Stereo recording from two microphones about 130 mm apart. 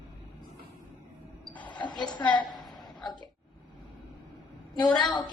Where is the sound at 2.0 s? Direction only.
35° left (ahead or behind).